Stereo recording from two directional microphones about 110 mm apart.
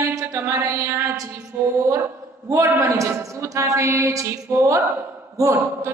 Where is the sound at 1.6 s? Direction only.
25° right (ahead or behind).